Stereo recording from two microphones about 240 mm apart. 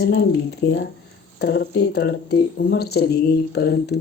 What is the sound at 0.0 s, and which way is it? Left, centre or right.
Speech, left.